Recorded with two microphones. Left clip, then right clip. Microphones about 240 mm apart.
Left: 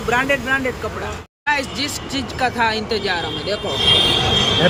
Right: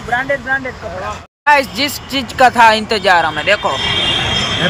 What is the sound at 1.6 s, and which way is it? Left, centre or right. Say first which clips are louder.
Speech: right 7 dB; centre.